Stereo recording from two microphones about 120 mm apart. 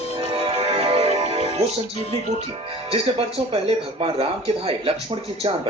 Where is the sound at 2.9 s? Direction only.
50° right (ahead or behind).